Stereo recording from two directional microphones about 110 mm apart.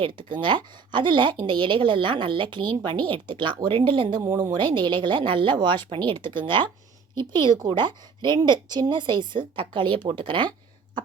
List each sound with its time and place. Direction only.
0.0 s a woman's voice: 50° right (ahead or behind)